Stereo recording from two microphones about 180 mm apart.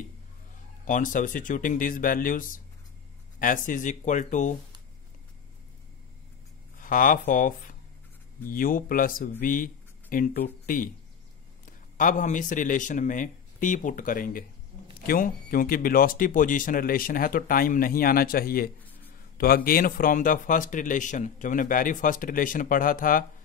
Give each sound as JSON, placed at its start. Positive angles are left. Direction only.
{"t": 0.8, "sound": "speech", "side_deg": 45}
{"t": 6.8, "sound": "speech", "side_deg": 50}